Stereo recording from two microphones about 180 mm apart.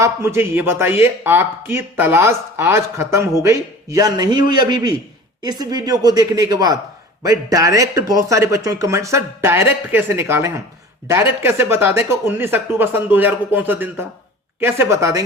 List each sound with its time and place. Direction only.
0.0 s speech: 15° right (ahead or behind)